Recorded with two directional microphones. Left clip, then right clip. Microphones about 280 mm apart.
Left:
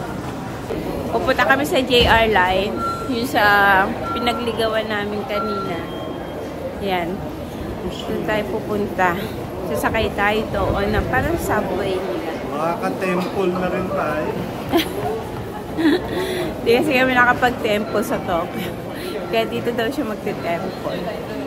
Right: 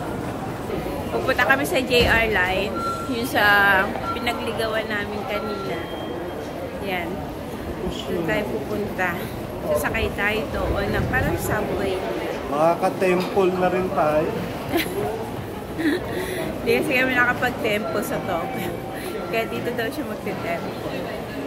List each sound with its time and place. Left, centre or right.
1.2 s a woman's voice: centre
9.0 s a woman's voice: centre
12.5 s speech: centre
15.8 s a woman's voice: centre